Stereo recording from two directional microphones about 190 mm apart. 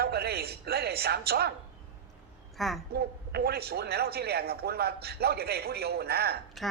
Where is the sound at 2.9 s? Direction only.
55° right (ahead or behind).